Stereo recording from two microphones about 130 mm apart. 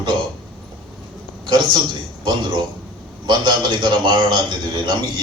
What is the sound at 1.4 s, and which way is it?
Speech, 40° right (ahead or behind).